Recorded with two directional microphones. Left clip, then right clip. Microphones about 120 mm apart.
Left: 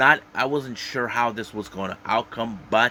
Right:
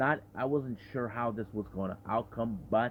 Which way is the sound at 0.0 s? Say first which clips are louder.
Left 13 dB; 5° left (ahead or behind).